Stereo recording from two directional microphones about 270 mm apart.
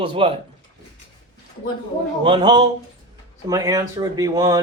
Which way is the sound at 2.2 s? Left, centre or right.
Centre.